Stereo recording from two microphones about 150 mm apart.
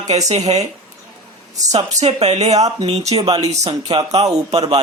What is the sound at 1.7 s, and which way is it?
Speech, 45° right (ahead or behind).